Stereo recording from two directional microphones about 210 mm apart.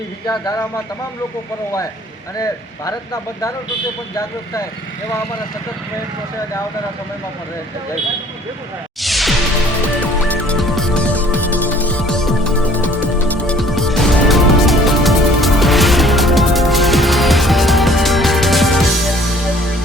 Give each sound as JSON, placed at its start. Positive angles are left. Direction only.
{"t": 0.3, "sound": "speech", "side_deg": 20}
{"t": 2.4, "sound": "speech", "side_deg": 15}
{"t": 9.0, "sound": "music", "side_deg": 0}